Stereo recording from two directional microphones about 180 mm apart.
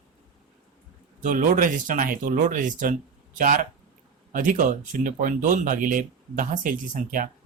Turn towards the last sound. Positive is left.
turn(degrees=-50)  # may be behind; listen again after turning